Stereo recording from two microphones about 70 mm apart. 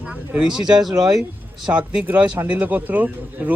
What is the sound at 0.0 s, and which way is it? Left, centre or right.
Speech, centre.